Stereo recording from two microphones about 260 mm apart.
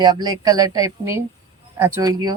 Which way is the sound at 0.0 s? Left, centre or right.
Centre.